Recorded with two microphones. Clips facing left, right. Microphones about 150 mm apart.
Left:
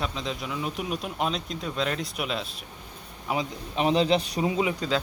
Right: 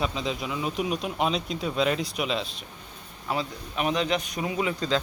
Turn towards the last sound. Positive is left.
turn(degrees=25)  # may be behind; listen again after turning